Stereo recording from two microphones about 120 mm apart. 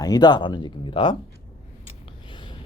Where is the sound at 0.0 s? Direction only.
35° left (ahead or behind).